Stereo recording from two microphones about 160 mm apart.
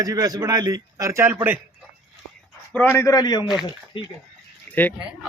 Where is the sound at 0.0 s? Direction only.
25° right (ahead or behind).